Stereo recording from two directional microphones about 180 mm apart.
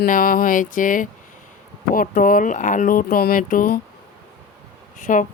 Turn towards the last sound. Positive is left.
turn(degrees=45)  # may be behind; listen again after turning